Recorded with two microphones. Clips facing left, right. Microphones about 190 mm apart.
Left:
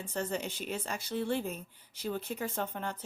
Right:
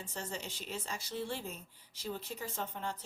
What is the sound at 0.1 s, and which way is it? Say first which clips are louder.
Speech: left 10 dB; 60° left (ahead or behind).